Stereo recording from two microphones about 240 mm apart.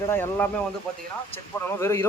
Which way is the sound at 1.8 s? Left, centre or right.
Centre.